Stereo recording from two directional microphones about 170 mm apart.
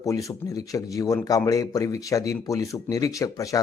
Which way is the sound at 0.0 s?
20° left (ahead or behind).